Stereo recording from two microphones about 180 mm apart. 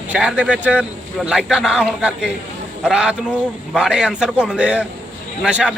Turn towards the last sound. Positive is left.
turn(degrees=-5)  # may be behind; listen again after turning